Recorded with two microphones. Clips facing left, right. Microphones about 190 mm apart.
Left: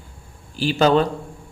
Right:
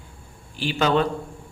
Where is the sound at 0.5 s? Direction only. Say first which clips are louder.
Left 4 dB; 35° left (ahead or behind).